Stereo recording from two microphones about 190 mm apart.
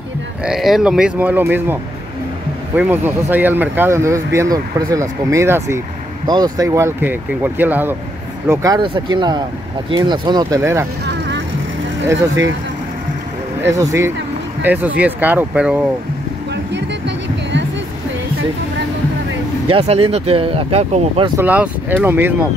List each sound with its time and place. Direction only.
0.5 s speech: centre (ahead or behind)
11.1 s vehicle: 70° right (ahead or behind)
13.6 s speech: 15° right (ahead or behind)
16.7 s music: 70° right (ahead or behind)
19.7 s speech: 30° right (ahead or behind)
21.4 s speech: 10° right (ahead or behind)